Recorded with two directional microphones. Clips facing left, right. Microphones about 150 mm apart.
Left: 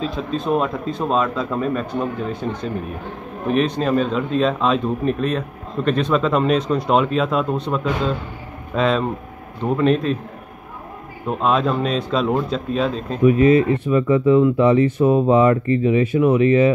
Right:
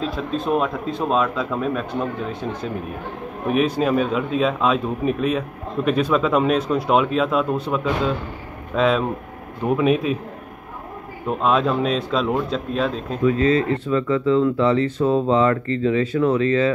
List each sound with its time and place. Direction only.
0.0 s speech: centre (ahead or behind)
11.2 s speech: centre (ahead or behind)
13.2 s speech: 20° left (ahead or behind)